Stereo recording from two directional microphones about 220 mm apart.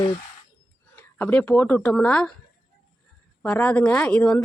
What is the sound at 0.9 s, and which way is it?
Speech, 5° left (ahead or behind).